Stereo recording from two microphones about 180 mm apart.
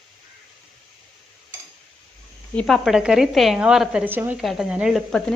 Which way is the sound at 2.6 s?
Centre (ahead or behind).